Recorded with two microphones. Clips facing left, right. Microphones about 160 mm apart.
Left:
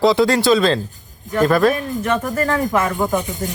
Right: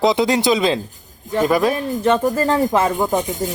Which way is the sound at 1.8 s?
30° right (ahead or behind).